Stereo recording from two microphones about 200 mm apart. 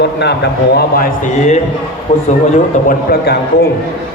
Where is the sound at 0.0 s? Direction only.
55° left (ahead or behind).